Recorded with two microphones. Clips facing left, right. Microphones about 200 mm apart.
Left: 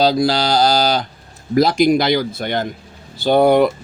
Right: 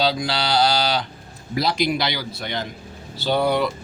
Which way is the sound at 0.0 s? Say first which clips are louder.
Left 7 dB; 40° left (ahead or behind).